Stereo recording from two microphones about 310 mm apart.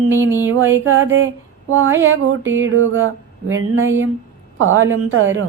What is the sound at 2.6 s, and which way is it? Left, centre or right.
A woman's voice, right.